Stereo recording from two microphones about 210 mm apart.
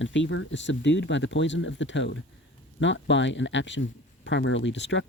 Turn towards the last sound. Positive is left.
turn(degrees=60)  # may be behind; listen again after turning